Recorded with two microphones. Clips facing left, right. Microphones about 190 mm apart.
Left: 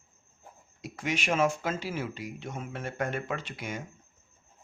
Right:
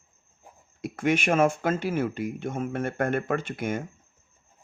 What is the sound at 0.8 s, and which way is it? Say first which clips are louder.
Speech: right 7 dB; 55° right (ahead or behind).